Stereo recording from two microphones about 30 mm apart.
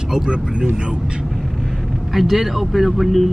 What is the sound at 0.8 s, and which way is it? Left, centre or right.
Speech, right.